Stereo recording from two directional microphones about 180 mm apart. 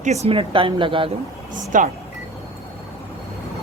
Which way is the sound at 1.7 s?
45° right (ahead or behind).